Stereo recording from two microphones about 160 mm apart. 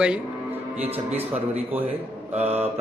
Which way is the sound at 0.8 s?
40° right (ahead or behind).